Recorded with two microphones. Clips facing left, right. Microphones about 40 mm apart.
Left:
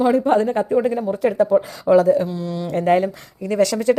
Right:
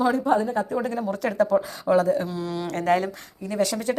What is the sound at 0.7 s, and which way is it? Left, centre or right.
Speech, left.